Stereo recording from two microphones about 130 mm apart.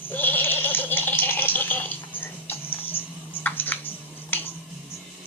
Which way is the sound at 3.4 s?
15° left (ahead or behind).